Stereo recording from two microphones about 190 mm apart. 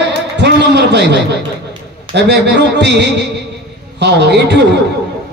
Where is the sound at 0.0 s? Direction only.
65° right (ahead or behind).